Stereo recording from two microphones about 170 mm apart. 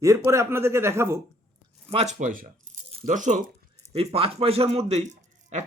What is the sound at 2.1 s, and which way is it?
Speech, 50° right (ahead or behind).